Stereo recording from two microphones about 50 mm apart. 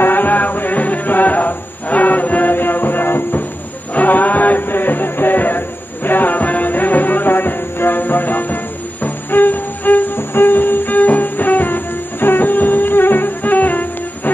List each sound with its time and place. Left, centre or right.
0.0 s music: left
3.9 s music: left